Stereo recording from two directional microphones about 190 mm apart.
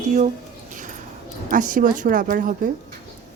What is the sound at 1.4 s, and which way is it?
Speech, 45° right (ahead or behind).